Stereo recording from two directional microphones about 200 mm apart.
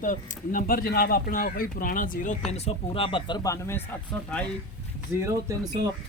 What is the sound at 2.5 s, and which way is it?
Speech, 30° left (ahead or behind).